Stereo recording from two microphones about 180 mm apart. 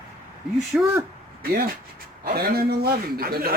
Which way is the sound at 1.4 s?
60° right (ahead or behind).